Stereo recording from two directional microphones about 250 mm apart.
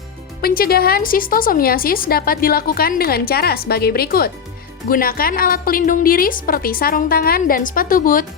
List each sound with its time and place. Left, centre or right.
0.4 s a woman's voice: left